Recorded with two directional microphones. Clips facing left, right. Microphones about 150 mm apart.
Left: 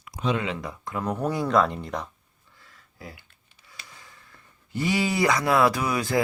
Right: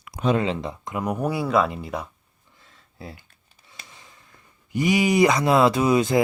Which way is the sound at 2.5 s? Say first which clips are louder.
Right 3 dB; 25° right (ahead or behind).